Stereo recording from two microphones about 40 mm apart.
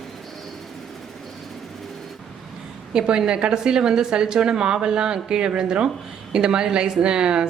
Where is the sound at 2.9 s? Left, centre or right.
Right.